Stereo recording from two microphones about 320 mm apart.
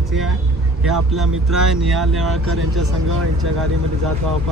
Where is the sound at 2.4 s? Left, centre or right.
Right.